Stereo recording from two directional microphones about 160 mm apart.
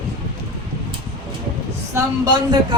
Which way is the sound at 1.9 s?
30° right (ahead or behind).